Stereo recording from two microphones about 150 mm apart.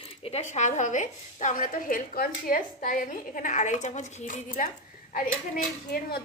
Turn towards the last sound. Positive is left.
turn(degrees=80)